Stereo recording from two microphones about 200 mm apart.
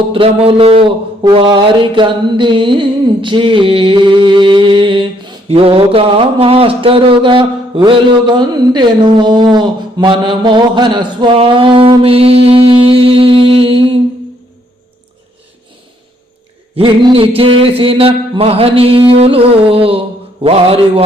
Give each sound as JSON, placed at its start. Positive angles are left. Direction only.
{"t": 0.1, "sound": "mantra", "side_deg": -25}
{"t": 16.7, "sound": "mantra", "side_deg": -25}